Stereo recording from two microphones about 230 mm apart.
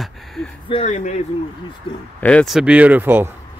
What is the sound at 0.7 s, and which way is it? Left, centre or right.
Speech, left.